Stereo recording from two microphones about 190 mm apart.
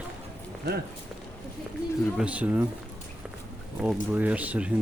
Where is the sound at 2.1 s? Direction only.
5° right (ahead or behind).